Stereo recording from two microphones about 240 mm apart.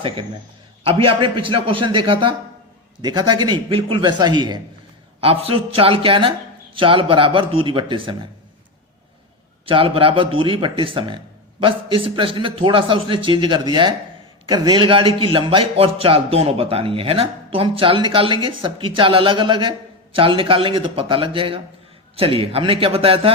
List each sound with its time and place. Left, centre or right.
0.9 s a man's voice: right
9.6 s a man's voice: right